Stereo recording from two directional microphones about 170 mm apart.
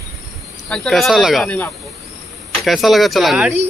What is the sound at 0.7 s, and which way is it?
Speech, 5° left (ahead or behind).